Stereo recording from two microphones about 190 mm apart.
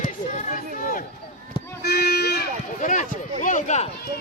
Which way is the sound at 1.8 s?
60° left (ahead or behind).